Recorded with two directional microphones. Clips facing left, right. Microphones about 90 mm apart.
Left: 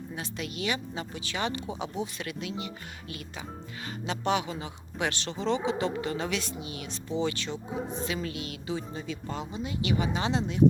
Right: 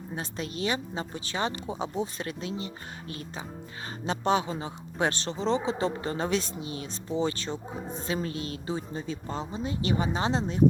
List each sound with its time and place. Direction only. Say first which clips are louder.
0.2 s speech: right 3 dB; 35° right (ahead or behind)